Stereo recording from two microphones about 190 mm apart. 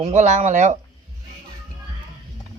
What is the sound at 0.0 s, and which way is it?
Speech, 35° right (ahead or behind).